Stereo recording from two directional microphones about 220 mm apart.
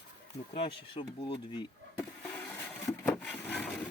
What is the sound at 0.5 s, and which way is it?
Speech, 25° left (ahead or behind).